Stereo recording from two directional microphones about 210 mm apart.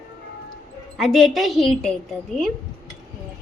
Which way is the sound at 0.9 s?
Centre (ahead or behind).